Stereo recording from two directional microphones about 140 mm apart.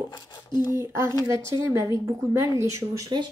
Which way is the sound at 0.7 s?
20° right (ahead or behind).